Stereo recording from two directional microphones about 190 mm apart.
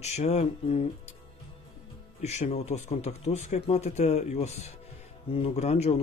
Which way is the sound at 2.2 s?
35° left (ahead or behind).